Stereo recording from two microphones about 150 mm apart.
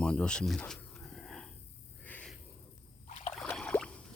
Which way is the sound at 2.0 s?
10° left (ahead or behind).